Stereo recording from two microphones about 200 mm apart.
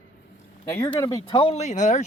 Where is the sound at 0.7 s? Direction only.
15° left (ahead or behind).